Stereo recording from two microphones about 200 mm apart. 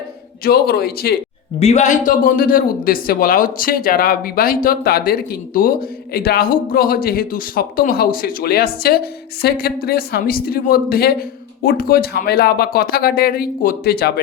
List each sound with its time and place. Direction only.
0.4 s speech: 50° left (ahead or behind)
1.5 s speech: 35° left (ahead or behind); by 14.1 s 50° left (ahead or behind)